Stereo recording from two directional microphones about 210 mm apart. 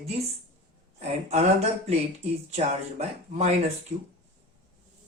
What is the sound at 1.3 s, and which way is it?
A man's voice, 30° right (ahead or behind).